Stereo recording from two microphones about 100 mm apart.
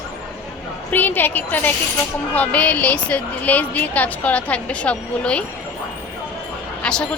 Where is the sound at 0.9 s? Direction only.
20° left (ahead or behind).